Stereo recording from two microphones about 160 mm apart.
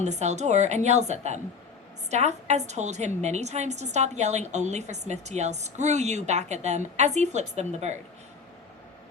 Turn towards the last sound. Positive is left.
turn(degrees=-45)  # may be behind; listen again after turning